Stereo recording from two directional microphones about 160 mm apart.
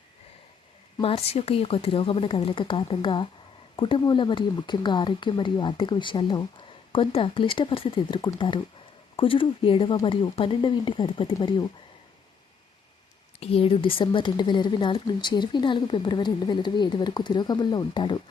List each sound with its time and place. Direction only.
0.9 s a woman's voice: 35° left (ahead or behind)
13.4 s a woman's voice: 35° left (ahead or behind)